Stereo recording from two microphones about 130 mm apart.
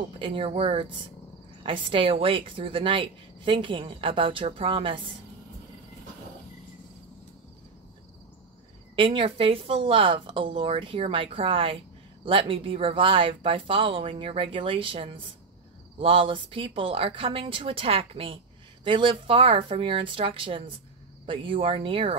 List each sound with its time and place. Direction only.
0.2 s speech: 45° right (ahead or behind)
8.9 s speech: 40° right (ahead or behind)